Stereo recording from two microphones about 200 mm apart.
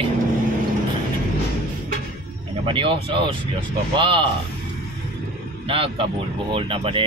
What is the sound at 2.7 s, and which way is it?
Speech, 25° right (ahead or behind).